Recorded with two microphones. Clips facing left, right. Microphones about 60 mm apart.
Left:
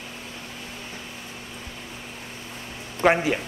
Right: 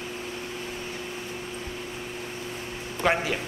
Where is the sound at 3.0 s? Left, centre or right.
Centre.